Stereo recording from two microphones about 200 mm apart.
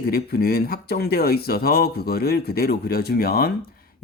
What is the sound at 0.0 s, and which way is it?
Speech, 50° left (ahead or behind).